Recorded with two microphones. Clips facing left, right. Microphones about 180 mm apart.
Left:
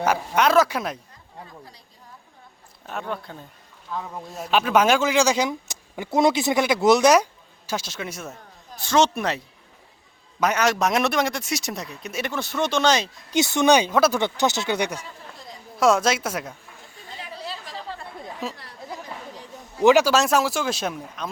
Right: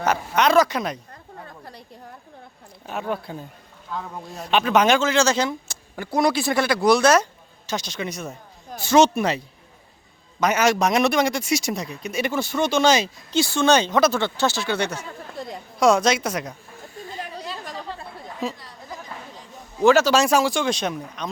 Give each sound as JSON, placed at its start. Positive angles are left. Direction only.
{"t": 0.0, "sound": "a man's voice", "side_deg": 10}
{"t": 1.1, "sound": "a sound", "side_deg": -60}
{"t": 2.8, "sound": "speech", "side_deg": -5}
{"t": 3.9, "sound": "speech", "side_deg": 0}
{"t": 7.7, "sound": "a man's voice", "side_deg": 5}
{"t": 8.8, "sound": "a man's voice", "side_deg": -5}
{"t": 10.4, "sound": "a man's voice", "side_deg": 0}
{"t": 13.3, "sound": "speech", "side_deg": 20}
{"t": 15.4, "sound": "a sound", "side_deg": -60}
{"t": 15.8, "sound": "a man's voice", "side_deg": 5}
{"t": 17.2, "sound": "chatter", "side_deg": -50}
{"t": 19.8, "sound": "speech", "side_deg": 15}
{"t": 20.1, "sound": "a man's voice", "side_deg": 0}